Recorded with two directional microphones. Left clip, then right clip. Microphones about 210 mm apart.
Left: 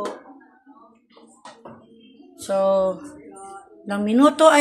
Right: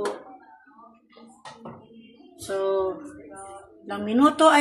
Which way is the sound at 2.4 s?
50° left (ahead or behind).